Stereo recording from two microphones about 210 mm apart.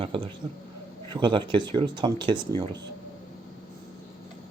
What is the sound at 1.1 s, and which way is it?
Speech, 20° right (ahead or behind).